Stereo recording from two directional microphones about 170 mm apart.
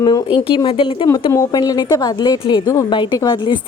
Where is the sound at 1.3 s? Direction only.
20° left (ahead or behind).